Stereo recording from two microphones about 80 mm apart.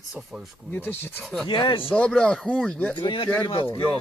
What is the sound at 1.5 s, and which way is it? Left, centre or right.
Speech, left.